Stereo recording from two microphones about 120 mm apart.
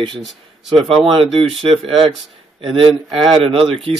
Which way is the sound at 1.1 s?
50° right (ahead or behind).